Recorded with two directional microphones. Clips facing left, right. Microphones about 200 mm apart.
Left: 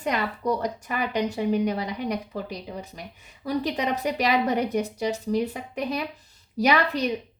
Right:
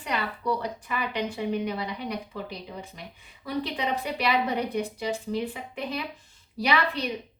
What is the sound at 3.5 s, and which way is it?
A woman's voice, 40° left (ahead or behind).